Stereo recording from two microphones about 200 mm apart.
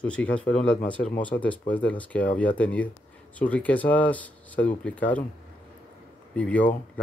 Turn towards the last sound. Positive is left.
turn(degrees=5)  # may be behind; listen again after turning